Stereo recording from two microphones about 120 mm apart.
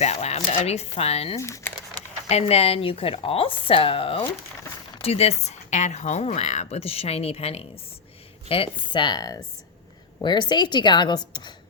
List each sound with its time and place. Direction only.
0.0 s speech: 65° left (ahead or behind)
1.4 s speech: 25° left (ahead or behind)
2.3 s a woman's voice: 55° left (ahead or behind); by 11.5 s 35° left (ahead or behind)